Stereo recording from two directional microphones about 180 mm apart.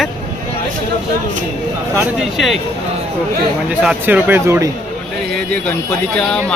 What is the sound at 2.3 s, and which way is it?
Speech, centre (ahead or behind).